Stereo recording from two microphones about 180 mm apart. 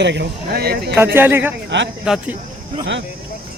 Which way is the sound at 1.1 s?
10° right (ahead or behind).